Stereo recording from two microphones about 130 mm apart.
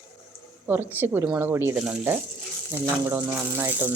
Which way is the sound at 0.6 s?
15° right (ahead or behind).